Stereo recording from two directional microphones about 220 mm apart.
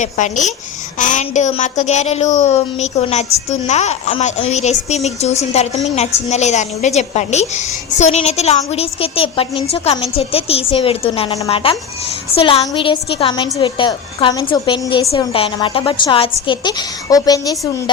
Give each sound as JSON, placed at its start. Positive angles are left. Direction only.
{"t": 0.0, "sound": "a woman's voice", "side_deg": 35}